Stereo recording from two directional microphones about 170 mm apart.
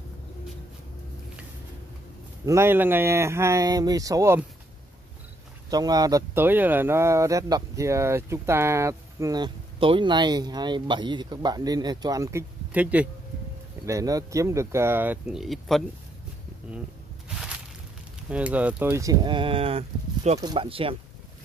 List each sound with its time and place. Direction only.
2.4 s speech: 15° right (ahead or behind)
5.7 s speech: 20° right (ahead or behind)
13.8 s speech: 20° right (ahead or behind); by 15.8 s centre (ahead or behind)
18.3 s speech: 10° right (ahead or behind); by 20.9 s 30° right (ahead or behind)